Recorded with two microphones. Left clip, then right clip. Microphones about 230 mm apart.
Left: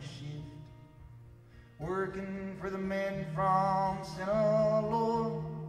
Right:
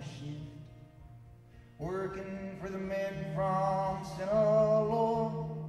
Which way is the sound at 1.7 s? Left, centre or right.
Centre.